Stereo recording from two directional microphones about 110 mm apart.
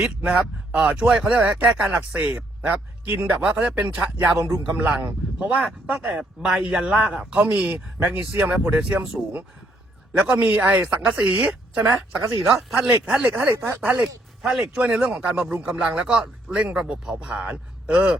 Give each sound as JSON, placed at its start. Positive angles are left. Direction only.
{"t": 0.2, "sound": "speech", "side_deg": -10}
{"t": 4.4, "sound": "a man's voice", "side_deg": -30}
{"t": 4.7, "sound": "speech", "side_deg": -15}
{"t": 14.0, "sound": "speech", "side_deg": -5}